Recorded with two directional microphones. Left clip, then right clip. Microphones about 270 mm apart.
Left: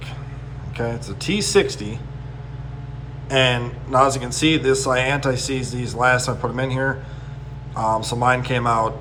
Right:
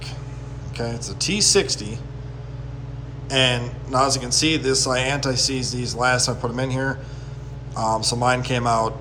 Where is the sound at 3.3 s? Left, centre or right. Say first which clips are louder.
Left 2 dB; centre.